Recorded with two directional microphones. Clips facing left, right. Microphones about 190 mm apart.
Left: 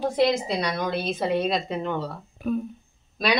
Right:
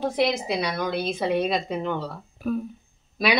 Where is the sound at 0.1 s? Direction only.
5° right (ahead or behind).